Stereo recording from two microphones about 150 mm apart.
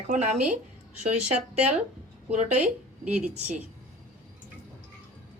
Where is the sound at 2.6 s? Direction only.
5° right (ahead or behind).